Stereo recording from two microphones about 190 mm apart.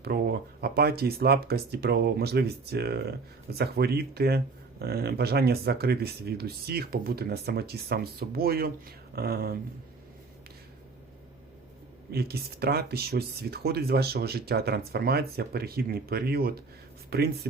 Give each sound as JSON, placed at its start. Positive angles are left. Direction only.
{"t": 0.0, "sound": "speech", "side_deg": -55}
{"t": 12.1, "sound": "speech", "side_deg": -55}